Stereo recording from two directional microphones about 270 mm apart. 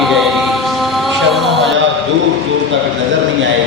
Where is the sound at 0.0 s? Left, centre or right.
Centre.